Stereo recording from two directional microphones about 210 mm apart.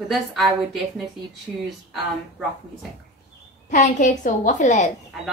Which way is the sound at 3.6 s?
35° left (ahead or behind).